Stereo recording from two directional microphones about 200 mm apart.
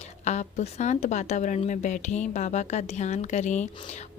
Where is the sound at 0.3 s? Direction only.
35° left (ahead or behind).